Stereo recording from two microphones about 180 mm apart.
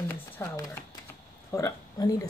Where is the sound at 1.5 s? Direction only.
20° left (ahead or behind).